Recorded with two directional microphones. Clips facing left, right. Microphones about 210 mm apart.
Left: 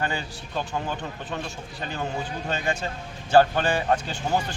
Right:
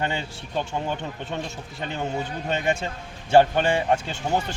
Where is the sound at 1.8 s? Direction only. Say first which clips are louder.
Right 2 dB; 20° right (ahead or behind).